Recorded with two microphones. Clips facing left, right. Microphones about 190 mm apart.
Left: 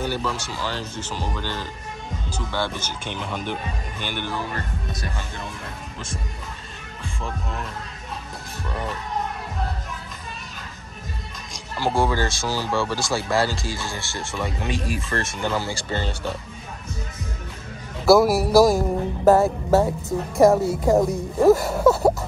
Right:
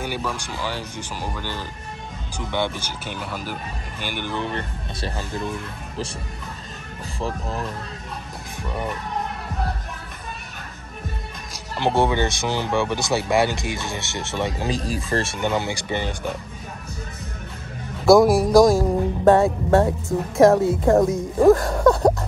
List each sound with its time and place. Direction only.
0.0 s speech: 10° right (ahead or behind)
4.4 s speech: 25° right (ahead or behind)
7.2 s speech: 35° right (ahead or behind)
8.6 s speech: 10° right (ahead or behind)
11.7 s speech: 20° right (ahead or behind)
18.0 s music: 5° left (ahead or behind)